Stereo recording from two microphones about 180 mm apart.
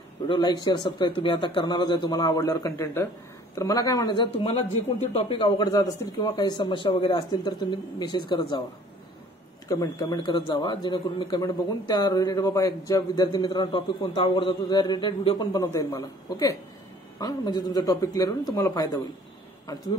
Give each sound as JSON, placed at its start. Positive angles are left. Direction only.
{"t": 0.3, "sound": "a man's voice", "side_deg": 25}
{"t": 9.7, "sound": "a man's voice", "side_deg": 20}